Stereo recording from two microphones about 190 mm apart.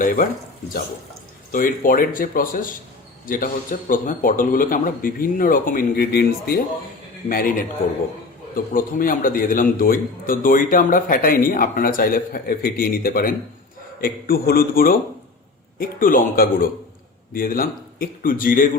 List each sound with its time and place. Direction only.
0.0 s a man's voice: 45° left (ahead or behind)
1.5 s a man's voice: 45° left (ahead or behind)